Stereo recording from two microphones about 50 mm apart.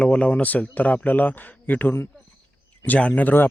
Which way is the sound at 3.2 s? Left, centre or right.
Left.